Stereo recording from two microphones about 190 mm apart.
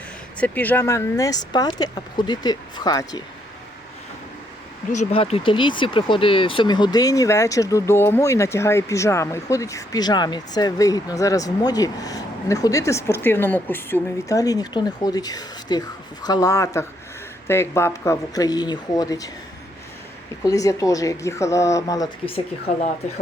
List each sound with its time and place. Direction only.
0.3 s speech: 10° left (ahead or behind)
4.9 s speech: 35° left (ahead or behind)
20.4 s speech: 20° left (ahead or behind)